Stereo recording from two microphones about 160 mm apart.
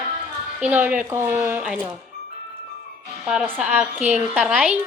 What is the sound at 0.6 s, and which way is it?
A woman's voice, 10° right (ahead or behind).